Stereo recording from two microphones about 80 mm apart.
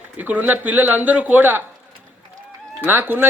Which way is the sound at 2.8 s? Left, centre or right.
Right.